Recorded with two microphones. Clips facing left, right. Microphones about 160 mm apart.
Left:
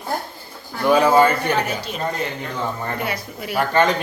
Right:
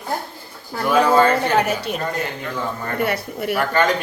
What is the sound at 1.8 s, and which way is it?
Speech, 60° right (ahead or behind).